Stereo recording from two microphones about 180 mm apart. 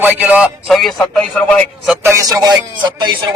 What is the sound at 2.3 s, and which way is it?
Speech, 20° right (ahead or behind).